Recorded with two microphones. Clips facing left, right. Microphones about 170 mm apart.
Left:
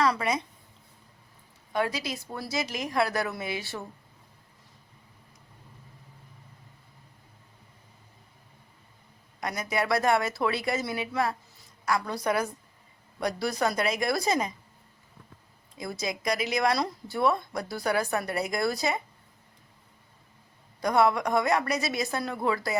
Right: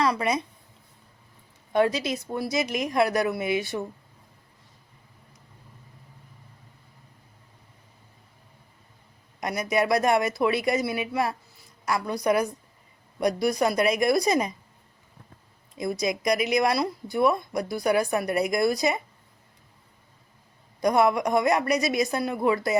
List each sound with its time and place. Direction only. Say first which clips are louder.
0.0 s speech: right 2 dB; 15° right (ahead or behind)
1.7 s a woman's voice: right 6 dB; 25° right (ahead or behind)
9.4 s speech: right 5 dB; 20° right (ahead or behind)
15.8 s speech: right 6 dB; 20° right (ahead or behind)
20.8 s speech: right 2 dB; 20° right (ahead or behind)